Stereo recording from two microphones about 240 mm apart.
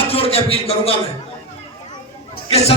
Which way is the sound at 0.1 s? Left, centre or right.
Left.